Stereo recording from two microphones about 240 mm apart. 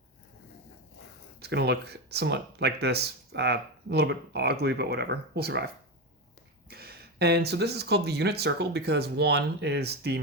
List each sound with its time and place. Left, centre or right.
1.4 s speech: right
6.7 s speech: right